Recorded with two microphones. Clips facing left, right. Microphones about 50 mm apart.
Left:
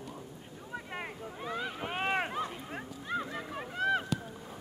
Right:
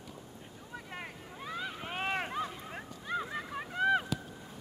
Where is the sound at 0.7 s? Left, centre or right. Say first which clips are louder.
Left 4 dB; centre.